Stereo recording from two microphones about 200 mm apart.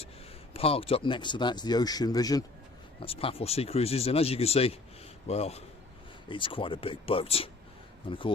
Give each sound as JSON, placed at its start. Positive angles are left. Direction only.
{"t": 0.5, "sound": "a man's voice", "side_deg": 30}